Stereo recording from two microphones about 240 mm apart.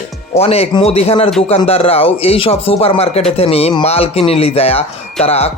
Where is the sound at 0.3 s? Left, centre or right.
Left.